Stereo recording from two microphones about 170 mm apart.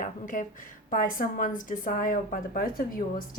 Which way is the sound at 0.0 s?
50° left (ahead or behind).